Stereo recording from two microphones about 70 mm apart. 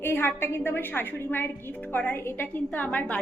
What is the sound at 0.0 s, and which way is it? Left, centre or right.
A woman's voice, left.